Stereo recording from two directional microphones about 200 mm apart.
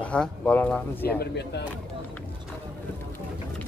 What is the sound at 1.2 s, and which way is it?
Speech, 55° left (ahead or behind).